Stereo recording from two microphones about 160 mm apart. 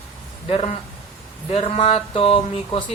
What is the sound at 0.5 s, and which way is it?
A woman's voice, 35° left (ahead or behind).